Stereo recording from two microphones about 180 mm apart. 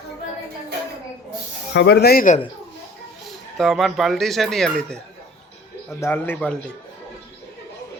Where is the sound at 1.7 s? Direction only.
65° left (ahead or behind).